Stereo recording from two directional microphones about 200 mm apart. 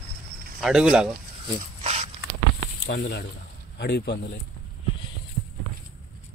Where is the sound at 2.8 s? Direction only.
55° left (ahead or behind).